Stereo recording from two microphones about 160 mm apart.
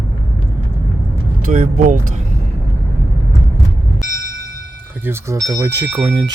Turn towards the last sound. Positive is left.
turn(degrees=-15)  # may be behind; listen again after turning